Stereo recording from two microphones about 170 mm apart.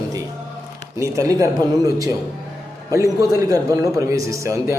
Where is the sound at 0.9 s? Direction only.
15° right (ahead or behind).